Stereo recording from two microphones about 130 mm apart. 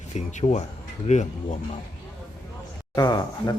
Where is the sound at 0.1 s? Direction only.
65° left (ahead or behind).